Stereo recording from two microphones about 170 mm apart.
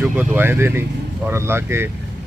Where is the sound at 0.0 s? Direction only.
5° right (ahead or behind).